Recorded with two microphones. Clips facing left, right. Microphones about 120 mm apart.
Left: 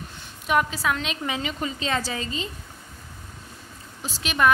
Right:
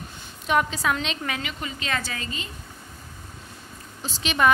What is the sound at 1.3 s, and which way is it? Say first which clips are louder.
A woman's voice: left 3 dB; 30° left (ahead or behind).